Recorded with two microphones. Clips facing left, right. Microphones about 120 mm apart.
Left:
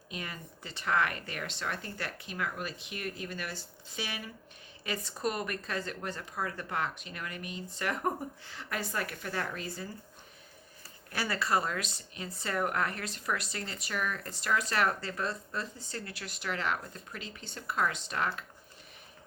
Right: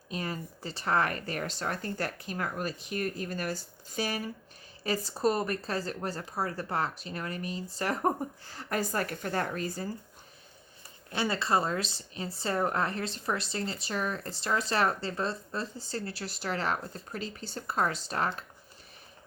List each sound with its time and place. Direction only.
0.1 s a woman's voice: 35° right (ahead or behind)
11.1 s a woman's voice: 25° right (ahead or behind)